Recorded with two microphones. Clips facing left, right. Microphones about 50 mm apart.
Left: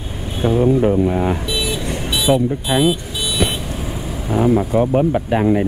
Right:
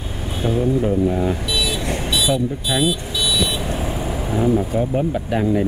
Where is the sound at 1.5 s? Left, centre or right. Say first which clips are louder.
Even; left.